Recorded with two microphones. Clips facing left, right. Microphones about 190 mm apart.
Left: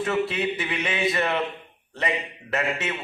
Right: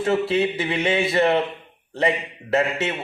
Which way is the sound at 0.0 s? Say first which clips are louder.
Right 4 dB; 30° right (ahead or behind).